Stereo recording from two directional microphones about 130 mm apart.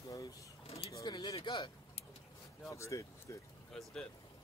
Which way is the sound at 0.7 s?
50° left (ahead or behind).